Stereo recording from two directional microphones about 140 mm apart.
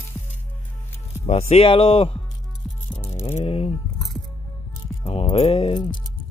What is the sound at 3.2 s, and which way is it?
Speech, 45° left (ahead or behind).